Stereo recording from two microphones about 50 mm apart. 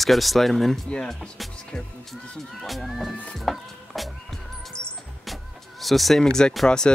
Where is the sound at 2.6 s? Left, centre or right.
Centre.